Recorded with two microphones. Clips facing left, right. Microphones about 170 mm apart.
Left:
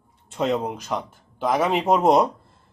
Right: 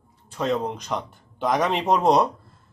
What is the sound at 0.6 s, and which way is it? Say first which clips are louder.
Speech: left 1 dB; 5° left (ahead or behind).